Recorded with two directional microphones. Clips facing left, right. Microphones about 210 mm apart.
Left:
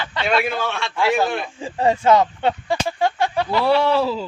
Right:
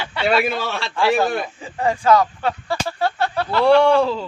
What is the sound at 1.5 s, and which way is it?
Speech, 25° left (ahead or behind).